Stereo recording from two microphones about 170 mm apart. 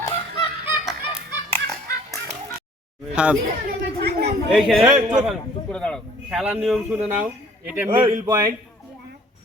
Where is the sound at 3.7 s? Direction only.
70° right (ahead or behind).